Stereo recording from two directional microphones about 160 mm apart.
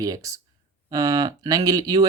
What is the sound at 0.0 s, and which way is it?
Speech, 20° right (ahead or behind).